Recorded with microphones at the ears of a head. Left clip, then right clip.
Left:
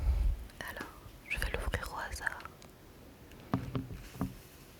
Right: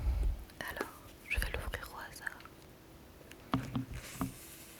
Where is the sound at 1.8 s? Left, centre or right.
Left.